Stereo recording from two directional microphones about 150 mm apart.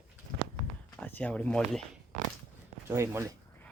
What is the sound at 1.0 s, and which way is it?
Speech, 10° left (ahead or behind).